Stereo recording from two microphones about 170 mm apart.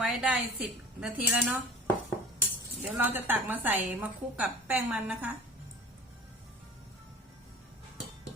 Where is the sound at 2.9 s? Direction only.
10° right (ahead or behind).